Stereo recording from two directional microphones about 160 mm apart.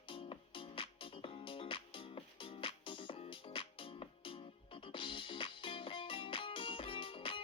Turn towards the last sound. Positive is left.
turn(degrees=35)  # may be behind; listen again after turning